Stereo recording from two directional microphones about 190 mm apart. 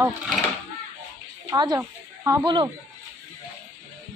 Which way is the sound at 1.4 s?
20° right (ahead or behind).